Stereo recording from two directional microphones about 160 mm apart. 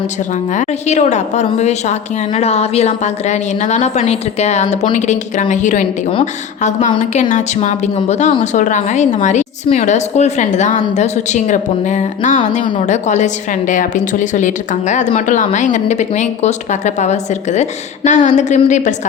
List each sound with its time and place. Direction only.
0.5 s a woman's voice: 45° left (ahead or behind)